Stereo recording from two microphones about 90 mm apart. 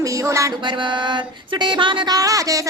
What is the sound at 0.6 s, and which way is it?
Music, 60° right (ahead or behind).